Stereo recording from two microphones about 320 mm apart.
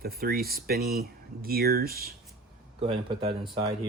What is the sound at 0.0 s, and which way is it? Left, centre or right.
Speech, right.